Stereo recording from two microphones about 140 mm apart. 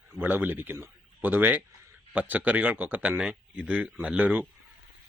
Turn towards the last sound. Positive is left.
turn(degrees=-10)  # may be behind; listen again after turning